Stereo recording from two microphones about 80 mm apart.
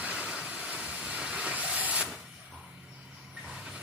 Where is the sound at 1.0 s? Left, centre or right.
Centre.